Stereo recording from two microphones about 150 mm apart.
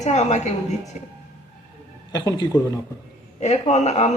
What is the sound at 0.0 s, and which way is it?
Speech, 50° left (ahead or behind).